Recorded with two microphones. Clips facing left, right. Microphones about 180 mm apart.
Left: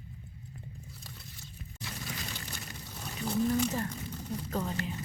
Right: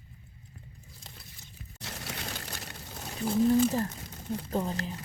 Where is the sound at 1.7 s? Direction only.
70° right (ahead or behind).